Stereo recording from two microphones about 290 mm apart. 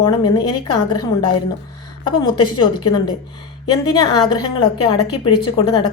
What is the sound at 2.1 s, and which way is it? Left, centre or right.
A woman's voice, centre.